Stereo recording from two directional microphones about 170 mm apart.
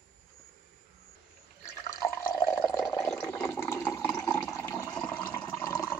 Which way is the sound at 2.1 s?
15° left (ahead or behind).